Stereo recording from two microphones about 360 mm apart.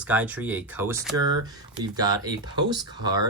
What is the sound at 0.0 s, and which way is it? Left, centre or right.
Speech, centre.